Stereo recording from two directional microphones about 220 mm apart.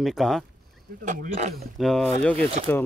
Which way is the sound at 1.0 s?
35° right (ahead or behind).